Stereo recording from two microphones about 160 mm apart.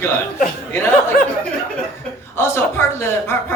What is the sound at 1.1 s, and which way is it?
Speech, 60° left (ahead or behind).